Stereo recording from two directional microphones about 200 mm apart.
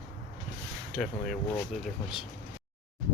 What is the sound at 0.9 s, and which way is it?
Speech, centre (ahead or behind).